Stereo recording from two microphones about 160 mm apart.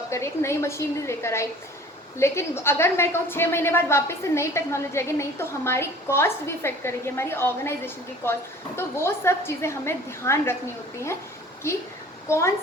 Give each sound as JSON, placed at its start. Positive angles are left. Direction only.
{"t": 0.1, "sound": "a woman's voice", "side_deg": 15}
{"t": 11.6, "sound": "a woman's voice", "side_deg": 15}